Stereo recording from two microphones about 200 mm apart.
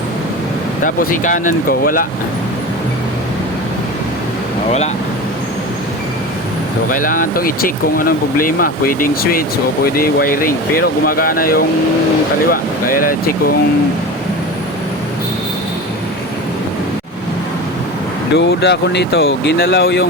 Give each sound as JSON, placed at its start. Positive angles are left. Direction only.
{"t": 0.9, "sound": "speech", "side_deg": 40}
{"t": 6.9, "sound": "speech", "side_deg": 45}
{"t": 18.3, "sound": "speech", "side_deg": 60}